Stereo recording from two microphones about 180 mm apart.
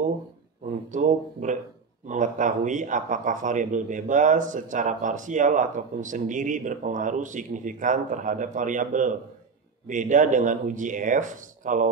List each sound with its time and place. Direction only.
0.9 s speech: 45° right (ahead or behind)